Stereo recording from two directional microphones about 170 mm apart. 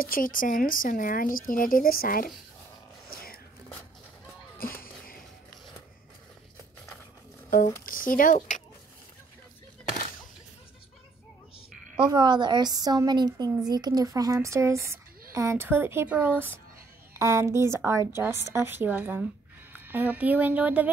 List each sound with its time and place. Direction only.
0.0 s speech: 55° left (ahead or behind)
3.1 s whispering: 60° left (ahead or behind)
4.6 s speech: 55° left (ahead or behind)
7.4 s speech: 55° left (ahead or behind)
12.0 s a woman's voice: 25° right (ahead or behind); by 20.9 s 10° right (ahead or behind)